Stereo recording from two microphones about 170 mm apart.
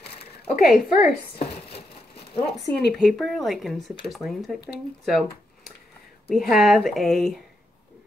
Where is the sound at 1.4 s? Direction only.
70° left (ahead or behind).